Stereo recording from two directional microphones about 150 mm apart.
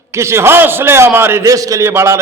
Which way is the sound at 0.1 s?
20° right (ahead or behind).